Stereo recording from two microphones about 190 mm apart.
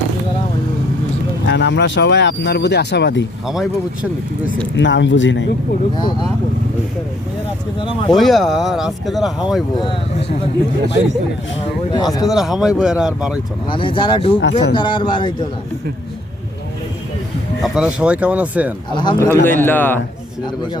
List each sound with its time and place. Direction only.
1.5 s speech: 70° left (ahead or behind)
3.4 s speech: centre (ahead or behind)
4.8 s speech: 70° left (ahead or behind)
6.0 s speech: 25° left (ahead or behind)
8.1 s speech: centre (ahead or behind)
11.6 s speech: 25° left (ahead or behind)
12.2 s speech: centre (ahead or behind)
13.7 s speech: 25° left (ahead or behind)
17.6 s speech: 5° right (ahead or behind)
18.9 s speech: 25° left (ahead or behind)
19.3 s a man's voice: 10° left (ahead or behind)